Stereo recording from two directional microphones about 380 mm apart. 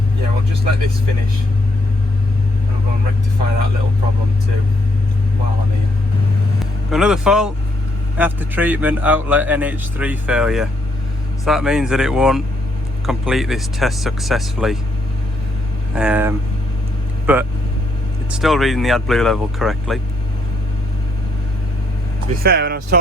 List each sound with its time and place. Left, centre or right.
6.9 s a man's voice: centre
16.0 s a man's voice: centre
22.4 s speech: right